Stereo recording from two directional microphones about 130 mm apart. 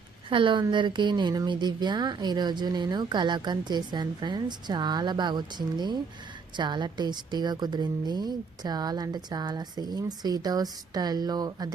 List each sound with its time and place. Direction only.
0.3 s a woman's voice: 40° right (ahead or behind)